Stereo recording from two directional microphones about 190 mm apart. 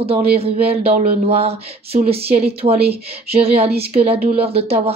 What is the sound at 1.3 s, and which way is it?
Speech, 30° right (ahead or behind).